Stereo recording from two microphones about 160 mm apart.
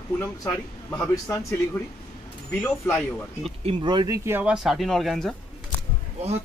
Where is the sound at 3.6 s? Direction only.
30° right (ahead or behind).